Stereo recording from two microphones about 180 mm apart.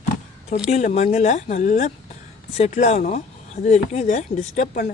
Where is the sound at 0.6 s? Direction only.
40° left (ahead or behind).